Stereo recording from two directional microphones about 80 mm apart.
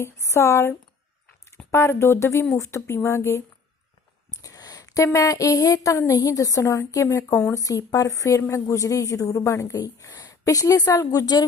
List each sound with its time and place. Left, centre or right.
0.0 s speech: left
1.7 s speech: left
4.3 s a sound: left
5.0 s a woman's voice: left